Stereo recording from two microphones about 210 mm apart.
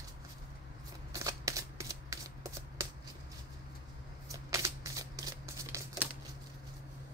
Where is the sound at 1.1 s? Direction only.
15° right (ahead or behind).